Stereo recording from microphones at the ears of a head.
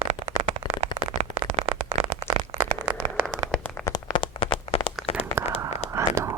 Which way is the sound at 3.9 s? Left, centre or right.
Left.